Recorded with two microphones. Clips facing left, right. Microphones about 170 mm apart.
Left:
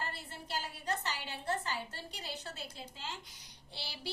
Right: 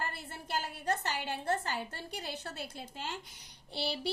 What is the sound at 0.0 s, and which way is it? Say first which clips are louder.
A woman's voice: right 3 dB; 50° right (ahead or behind).